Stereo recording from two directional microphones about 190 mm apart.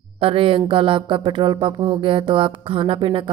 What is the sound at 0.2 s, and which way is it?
Speech, 30° right (ahead or behind).